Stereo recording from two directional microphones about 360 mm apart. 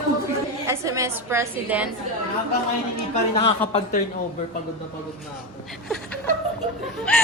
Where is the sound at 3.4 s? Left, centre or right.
Centre.